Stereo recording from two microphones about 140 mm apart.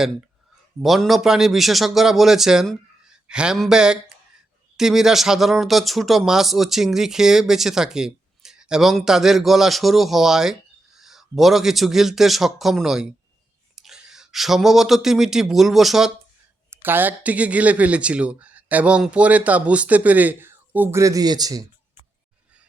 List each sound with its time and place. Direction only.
0.8 s speech: centre (ahead or behind)
16.8 s speech: 15° right (ahead or behind)